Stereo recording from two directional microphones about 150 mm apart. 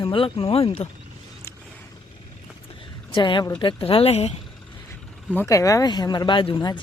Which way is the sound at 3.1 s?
35° left (ahead or behind).